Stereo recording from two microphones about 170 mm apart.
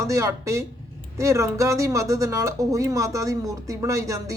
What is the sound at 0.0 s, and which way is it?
Speech, 20° right (ahead or behind).